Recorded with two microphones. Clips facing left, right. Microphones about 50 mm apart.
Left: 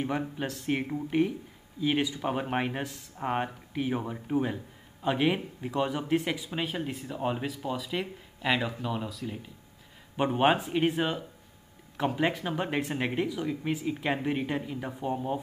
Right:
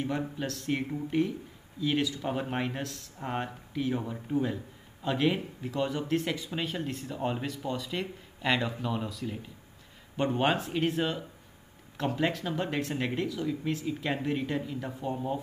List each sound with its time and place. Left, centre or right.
0.0 s speech: centre